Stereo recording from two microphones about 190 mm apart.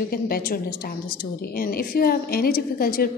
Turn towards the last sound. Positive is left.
turn(degrees=50)  # may be behind; listen again after turning